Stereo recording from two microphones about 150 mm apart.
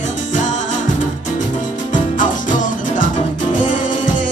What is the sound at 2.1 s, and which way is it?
Music, 60° left (ahead or behind).